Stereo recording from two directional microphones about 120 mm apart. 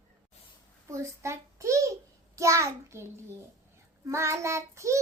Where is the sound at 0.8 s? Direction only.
25° right (ahead or behind).